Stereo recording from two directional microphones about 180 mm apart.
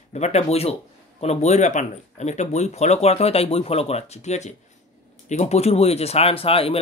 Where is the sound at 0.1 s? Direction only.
35° left (ahead or behind).